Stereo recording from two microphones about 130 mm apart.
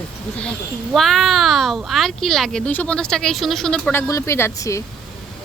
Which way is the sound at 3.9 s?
20° left (ahead or behind).